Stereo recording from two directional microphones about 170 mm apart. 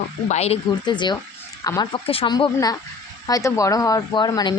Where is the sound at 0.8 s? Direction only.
25° left (ahead or behind).